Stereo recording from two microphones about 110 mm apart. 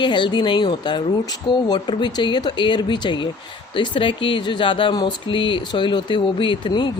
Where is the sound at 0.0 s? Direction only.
45° left (ahead or behind).